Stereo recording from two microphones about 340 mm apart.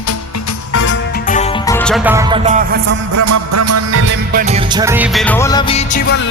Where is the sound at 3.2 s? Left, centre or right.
Right.